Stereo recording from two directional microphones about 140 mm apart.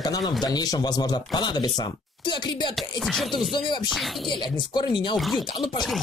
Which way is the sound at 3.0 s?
Centre (ahead or behind).